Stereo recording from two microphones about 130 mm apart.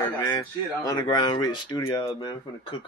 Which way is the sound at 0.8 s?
30° left (ahead or behind).